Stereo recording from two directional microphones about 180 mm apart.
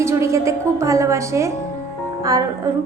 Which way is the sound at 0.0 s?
15° right (ahead or behind).